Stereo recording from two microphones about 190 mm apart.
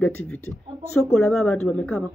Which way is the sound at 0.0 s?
10° left (ahead or behind).